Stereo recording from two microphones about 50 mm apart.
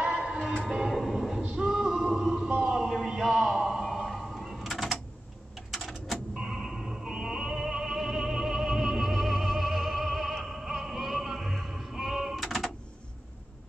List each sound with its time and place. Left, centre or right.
0.0 s music: right
0.7 s train: centre
0.9 s horse: centre
1.6 s music: centre
2.6 s a sound: centre
3.8 s music: centre
5.7 s a sound: centre
6.3 s music: centre